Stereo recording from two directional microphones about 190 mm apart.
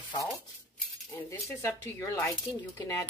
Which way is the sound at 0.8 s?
10° left (ahead or behind).